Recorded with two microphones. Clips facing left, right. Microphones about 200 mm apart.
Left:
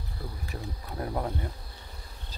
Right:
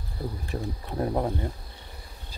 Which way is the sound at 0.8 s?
25° right (ahead or behind).